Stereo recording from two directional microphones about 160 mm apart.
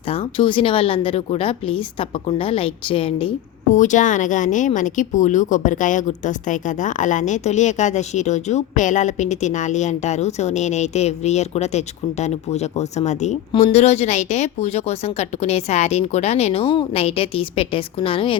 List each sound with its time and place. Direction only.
0.1 s speech: 35° left (ahead or behind)
3.7 s speech: 50° left (ahead or behind); by 18.3 s 35° left (ahead or behind)